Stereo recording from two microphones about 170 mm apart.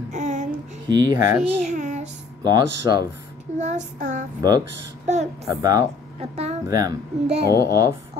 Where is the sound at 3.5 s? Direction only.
45° right (ahead or behind).